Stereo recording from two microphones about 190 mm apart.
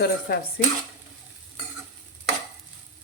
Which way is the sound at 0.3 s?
55° left (ahead or behind).